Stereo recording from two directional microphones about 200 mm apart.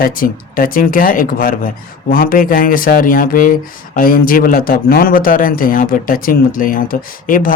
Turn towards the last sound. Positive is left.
turn(degrees=45)  # may be behind; listen again after turning